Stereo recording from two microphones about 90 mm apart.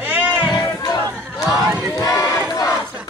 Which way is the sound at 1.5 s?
Centre (ahead or behind).